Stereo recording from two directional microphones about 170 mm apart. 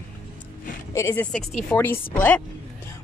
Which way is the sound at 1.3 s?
5° left (ahead or behind).